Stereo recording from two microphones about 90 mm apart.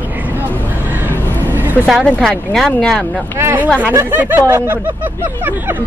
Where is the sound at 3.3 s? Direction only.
25° right (ahead or behind).